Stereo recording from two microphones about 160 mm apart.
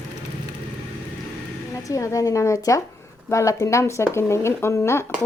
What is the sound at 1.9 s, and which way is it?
A woman's voice, 20° left (ahead or behind).